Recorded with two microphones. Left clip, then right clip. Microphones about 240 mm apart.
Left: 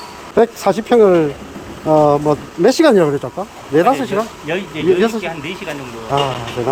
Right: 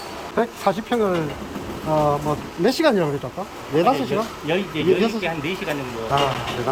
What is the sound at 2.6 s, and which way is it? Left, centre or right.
Speech, left.